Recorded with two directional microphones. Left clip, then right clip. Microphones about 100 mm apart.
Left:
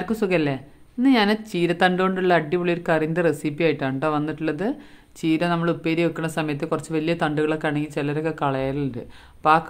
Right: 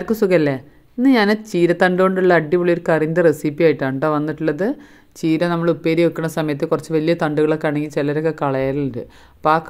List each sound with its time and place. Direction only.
0.0 s speech: 35° right (ahead or behind)